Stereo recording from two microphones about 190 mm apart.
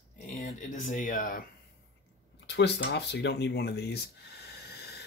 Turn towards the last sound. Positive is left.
turn(degrees=60)  # may be behind; listen again after turning